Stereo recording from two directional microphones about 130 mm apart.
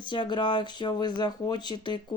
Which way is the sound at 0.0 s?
35° left (ahead or behind).